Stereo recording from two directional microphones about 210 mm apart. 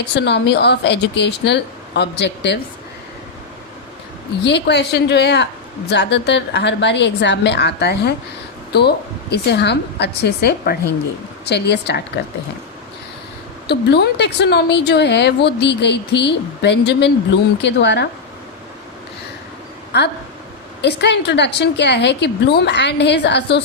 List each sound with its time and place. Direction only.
0.0 s a woman's voice: 55° left (ahead or behind)
4.4 s a woman's voice: 55° left (ahead or behind)
13.7 s a woman's voice: 50° left (ahead or behind)
19.9 s a woman's voice: 55° left (ahead or behind)